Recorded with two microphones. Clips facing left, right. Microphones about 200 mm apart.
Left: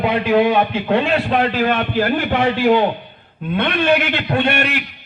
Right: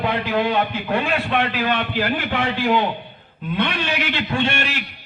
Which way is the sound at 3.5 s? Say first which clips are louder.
Left 7 dB; 55° left (ahead or behind).